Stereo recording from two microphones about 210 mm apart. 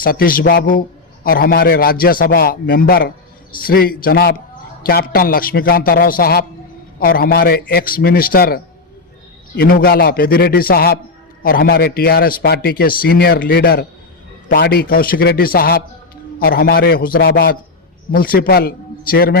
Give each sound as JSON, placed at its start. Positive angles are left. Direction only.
{"t": 0.0, "sound": "a man's voice", "side_deg": 45}